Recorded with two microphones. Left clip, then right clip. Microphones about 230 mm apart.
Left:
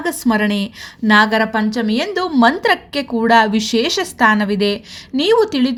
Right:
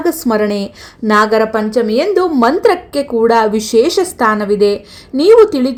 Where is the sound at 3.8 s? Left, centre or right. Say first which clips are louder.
Right 5 dB; left.